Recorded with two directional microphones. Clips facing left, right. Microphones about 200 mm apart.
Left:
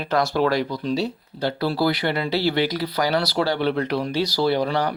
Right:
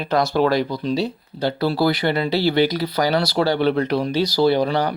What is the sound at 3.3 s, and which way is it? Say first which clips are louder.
Speech: right 3 dB; 35° right (ahead or behind).